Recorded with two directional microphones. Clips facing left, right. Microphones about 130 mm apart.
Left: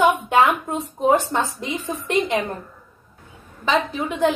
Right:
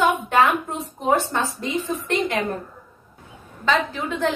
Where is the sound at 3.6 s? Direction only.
15° left (ahead or behind).